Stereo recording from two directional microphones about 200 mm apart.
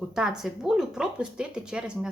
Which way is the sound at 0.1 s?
5° right (ahead or behind).